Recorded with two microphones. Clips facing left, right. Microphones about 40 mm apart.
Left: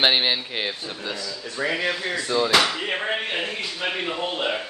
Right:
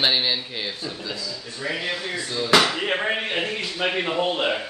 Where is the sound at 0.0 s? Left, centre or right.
Left.